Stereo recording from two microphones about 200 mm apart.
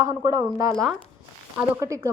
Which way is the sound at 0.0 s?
20° right (ahead or behind).